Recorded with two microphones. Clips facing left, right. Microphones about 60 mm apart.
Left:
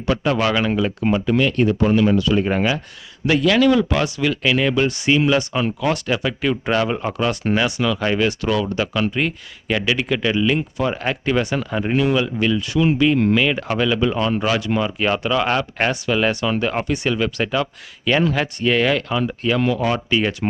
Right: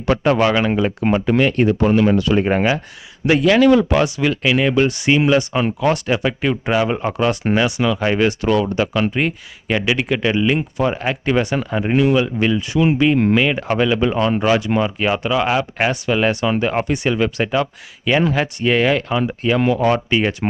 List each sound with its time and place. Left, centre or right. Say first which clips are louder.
0.3 s speech: right 3 dB; centre
1.0 s speech: right 2 dB; right
4.0 s speech: right 2 dB; centre
5.1 s speech: right 2 dB; centre
14.8 s speech: right 1 dB; centre
17.2 s speech: right 3 dB; centre